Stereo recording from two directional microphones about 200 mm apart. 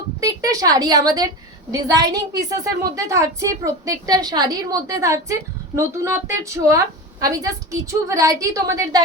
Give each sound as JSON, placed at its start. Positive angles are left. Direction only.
{"t": 0.2, "sound": "a woman's voice", "side_deg": -15}